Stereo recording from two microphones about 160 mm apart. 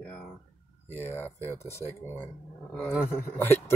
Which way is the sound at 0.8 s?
15° right (ahead or behind).